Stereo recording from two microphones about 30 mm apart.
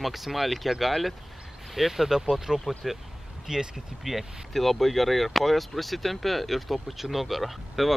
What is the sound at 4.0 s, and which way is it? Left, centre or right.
Speech, centre.